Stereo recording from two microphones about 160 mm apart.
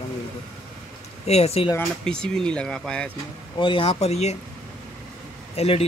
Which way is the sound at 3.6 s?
35° left (ahead or behind).